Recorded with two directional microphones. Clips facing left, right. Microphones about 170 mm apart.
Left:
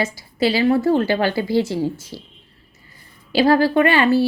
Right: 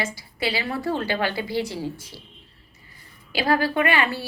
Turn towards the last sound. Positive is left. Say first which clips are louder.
# left 8 dB
turn(degrees=30)  # may be behind; listen again after turning